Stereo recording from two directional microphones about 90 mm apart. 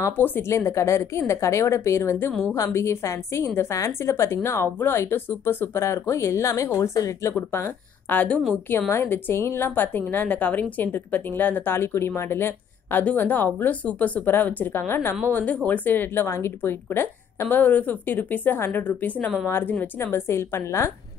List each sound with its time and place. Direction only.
0.2 s a woman's voice: 25° left (ahead or behind)
7.3 s a woman's voice: 20° left (ahead or behind)